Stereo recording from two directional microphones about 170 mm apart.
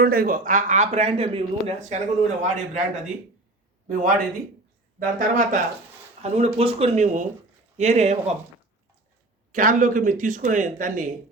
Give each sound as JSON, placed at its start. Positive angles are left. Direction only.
{"t": 0.0, "sound": "a man's voice", "side_deg": -60}
{"t": 6.2, "sound": "speech", "side_deg": -40}
{"t": 9.5, "sound": "a man's voice", "side_deg": -50}